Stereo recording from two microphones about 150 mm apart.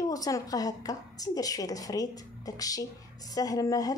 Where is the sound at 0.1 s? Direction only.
25° left (ahead or behind).